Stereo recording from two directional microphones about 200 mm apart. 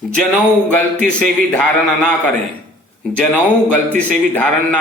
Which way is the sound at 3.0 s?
5° left (ahead or behind).